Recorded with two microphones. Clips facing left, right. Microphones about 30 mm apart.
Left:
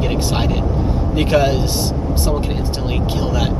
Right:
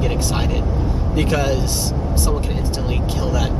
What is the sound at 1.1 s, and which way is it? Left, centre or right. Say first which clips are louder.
Speech: left 4 dB; left.